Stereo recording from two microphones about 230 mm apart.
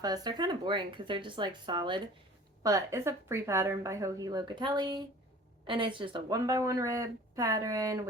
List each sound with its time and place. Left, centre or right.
0.0 s speech: centre